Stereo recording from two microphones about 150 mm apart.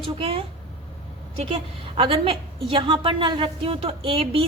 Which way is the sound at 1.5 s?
40° right (ahead or behind).